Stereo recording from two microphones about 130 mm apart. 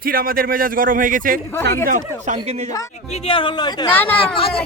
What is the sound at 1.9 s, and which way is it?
Speech, 70° right (ahead or behind).